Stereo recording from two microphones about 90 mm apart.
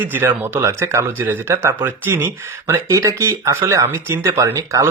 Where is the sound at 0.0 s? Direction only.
20° right (ahead or behind).